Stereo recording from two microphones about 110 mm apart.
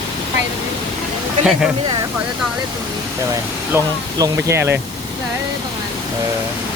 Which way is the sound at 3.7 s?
30° right (ahead or behind).